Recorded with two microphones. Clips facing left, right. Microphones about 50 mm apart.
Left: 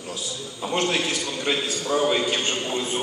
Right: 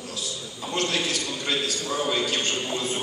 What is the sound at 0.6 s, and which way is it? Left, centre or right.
A man's voice, left.